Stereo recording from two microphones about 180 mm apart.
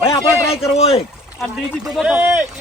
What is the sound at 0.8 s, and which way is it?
Speech, 30° left (ahead or behind).